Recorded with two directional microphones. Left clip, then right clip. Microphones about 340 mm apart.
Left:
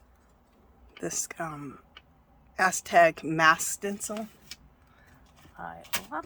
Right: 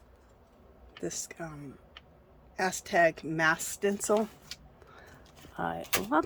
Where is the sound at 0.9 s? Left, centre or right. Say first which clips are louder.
Left 3 dB; centre.